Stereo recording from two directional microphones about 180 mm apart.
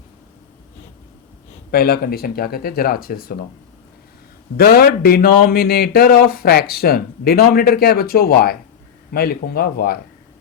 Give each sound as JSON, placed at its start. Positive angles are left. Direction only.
{"t": 1.7, "sound": "speech", "side_deg": 55}
{"t": 4.5, "sound": "speech", "side_deg": 55}